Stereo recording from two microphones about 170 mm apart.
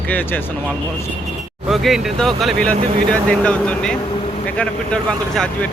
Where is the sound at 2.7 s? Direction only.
35° right (ahead or behind).